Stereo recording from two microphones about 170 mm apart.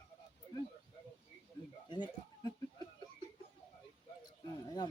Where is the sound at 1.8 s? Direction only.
25° left (ahead or behind).